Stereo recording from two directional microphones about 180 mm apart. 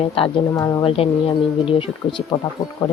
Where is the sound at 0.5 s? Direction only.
20° left (ahead or behind).